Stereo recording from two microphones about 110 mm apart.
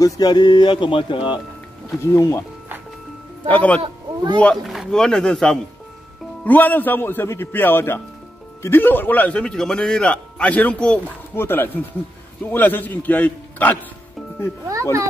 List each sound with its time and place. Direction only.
0.0 s speech: 40° left (ahead or behind)
2.1 s a man's voice: 30° left (ahead or behind)
3.4 s a man's voice: 15° left (ahead or behind)
3.8 s speech: 45° right (ahead or behind)
4.6 s a man's voice: centre (ahead or behind)
14.7 s speech: 30° right (ahead or behind)